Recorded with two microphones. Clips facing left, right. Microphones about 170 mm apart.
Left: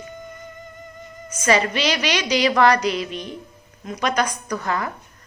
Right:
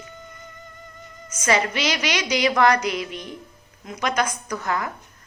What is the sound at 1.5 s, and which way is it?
A woman's voice, 15° right (ahead or behind).